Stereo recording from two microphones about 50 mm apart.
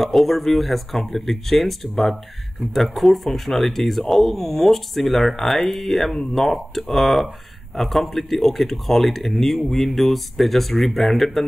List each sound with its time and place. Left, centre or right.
0.0 s speech: centre